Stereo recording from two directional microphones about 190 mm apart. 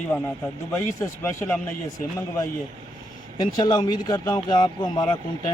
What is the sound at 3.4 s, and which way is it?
Speech, 20° left (ahead or behind).